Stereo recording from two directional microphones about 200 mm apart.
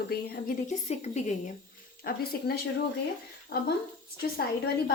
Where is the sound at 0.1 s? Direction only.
50° left (ahead or behind).